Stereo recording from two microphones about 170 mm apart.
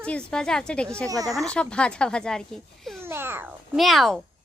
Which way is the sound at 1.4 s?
5° left (ahead or behind).